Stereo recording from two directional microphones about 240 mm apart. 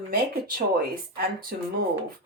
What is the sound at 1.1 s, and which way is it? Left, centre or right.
Speech, right.